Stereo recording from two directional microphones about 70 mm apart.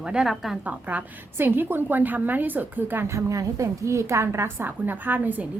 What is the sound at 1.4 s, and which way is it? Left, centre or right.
A woman's voice, right.